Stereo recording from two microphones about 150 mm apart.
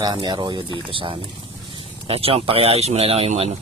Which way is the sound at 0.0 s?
30° right (ahead or behind).